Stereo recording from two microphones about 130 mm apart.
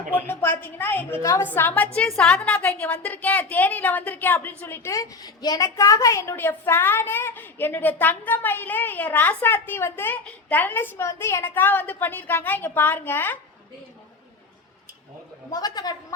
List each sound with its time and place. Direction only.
0.1 s a woman's voice: 15° left (ahead or behind)
15.4 s speech: 30° left (ahead or behind)